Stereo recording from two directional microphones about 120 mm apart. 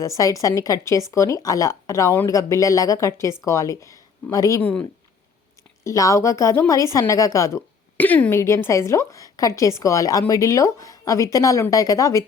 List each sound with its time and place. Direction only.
0.0 s a woman's voice: 25° left (ahead or behind)
5.8 s a woman's voice: 25° left (ahead or behind)
7.9 s a woman's voice: 15° left (ahead or behind)